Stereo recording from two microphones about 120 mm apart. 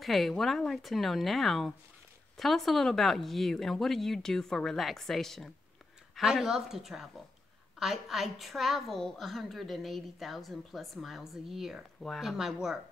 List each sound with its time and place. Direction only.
0.0 s a woman's voice: centre (ahead or behind)